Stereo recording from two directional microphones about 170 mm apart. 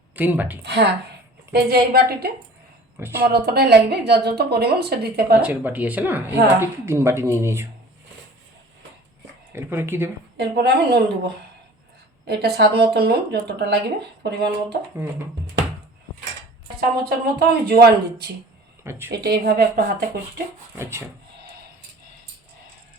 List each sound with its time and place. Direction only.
0.2 s speech: 10° right (ahead or behind)
0.6 s speech: 80° right
1.5 s a woman's voice: 65° right (ahead or behind)
3.0 s speech: 15° right (ahead or behind)
3.4 s a woman's voice: 70° right (ahead or behind)
5.4 s speech: 10° right (ahead or behind)
9.5 s speech: 15° right (ahead or behind)
10.3 s a woman's voice: 80° right
12.2 s a woman's voice: 75° right (ahead or behind)
17.1 s a woman's voice: 65° right (ahead or behind)
18.8 s speech: 15° right (ahead or behind)
19.1 s a woman's voice: 75° right (ahead or behind)